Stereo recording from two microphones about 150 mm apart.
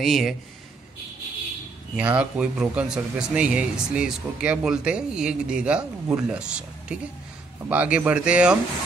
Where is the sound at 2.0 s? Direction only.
10° right (ahead or behind).